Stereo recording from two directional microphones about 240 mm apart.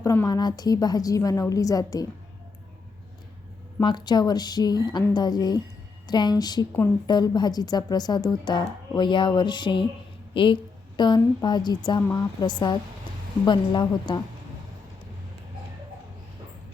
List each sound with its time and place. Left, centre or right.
0.0 s a woman's voice: centre
3.8 s a woman's voice: centre